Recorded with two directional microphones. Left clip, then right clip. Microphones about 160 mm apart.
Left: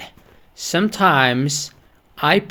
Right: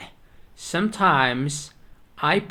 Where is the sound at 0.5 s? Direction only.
45° left (ahead or behind).